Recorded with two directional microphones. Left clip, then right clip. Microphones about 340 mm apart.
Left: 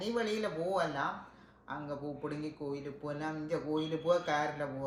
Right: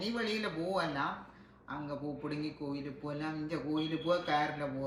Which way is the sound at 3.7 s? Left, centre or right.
Centre.